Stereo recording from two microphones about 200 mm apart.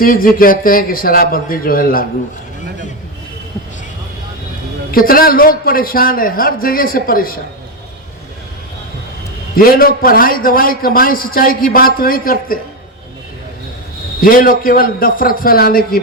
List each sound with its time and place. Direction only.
0.0 s a man's voice: 45° left (ahead or behind)
4.9 s a man's voice: 45° left (ahead or behind)
9.6 s a man's voice: 45° left (ahead or behind)
14.2 s a man's voice: 45° left (ahead or behind)